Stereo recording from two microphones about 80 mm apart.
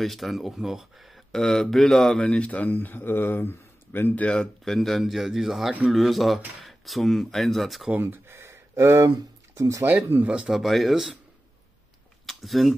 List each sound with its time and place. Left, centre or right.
0.0 s speech: centre
7.9 s speech: right
10.2 s speech: centre
10.5 s speech: centre
12.3 s speech: centre